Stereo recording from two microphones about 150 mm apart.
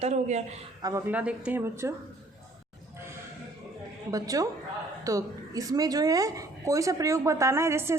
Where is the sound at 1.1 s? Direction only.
10° right (ahead or behind).